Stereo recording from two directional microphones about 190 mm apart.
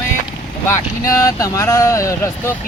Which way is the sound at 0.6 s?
15° left (ahead or behind).